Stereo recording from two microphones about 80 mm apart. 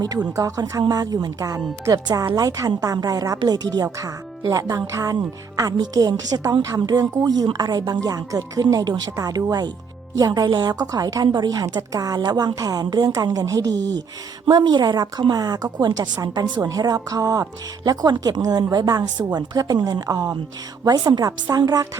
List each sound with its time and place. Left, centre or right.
0.3 s a woman's voice: right
4.0 s speech: right
5.9 s speech: right
6.4 s speech: right
6.8 s a woman's voice: right
11.6 s speech: right
12.5 s speech: right
13.2 s speech: right
14.5 s a woman's voice: right